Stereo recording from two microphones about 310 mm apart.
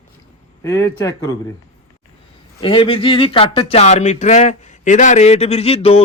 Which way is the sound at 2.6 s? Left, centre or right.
Centre.